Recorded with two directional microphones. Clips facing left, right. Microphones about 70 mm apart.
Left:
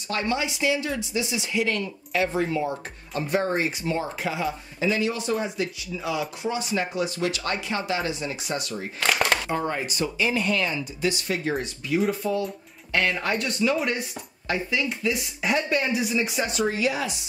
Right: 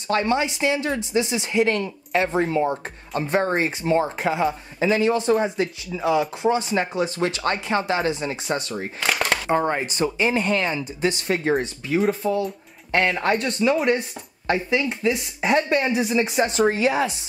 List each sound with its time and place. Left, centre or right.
0.1 s speech: right
9.0 s a sound: centre
9.5 s speech: right
13.2 s speech: right